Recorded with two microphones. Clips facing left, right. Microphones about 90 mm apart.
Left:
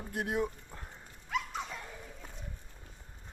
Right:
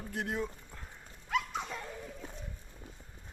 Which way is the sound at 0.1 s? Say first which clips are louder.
Left 3 dB; 10° left (ahead or behind).